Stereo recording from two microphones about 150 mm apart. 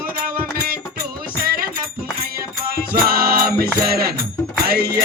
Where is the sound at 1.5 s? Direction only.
85° right.